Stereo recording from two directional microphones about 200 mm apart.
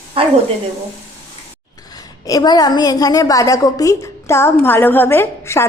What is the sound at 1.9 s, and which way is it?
A woman's voice, 20° left (ahead or behind).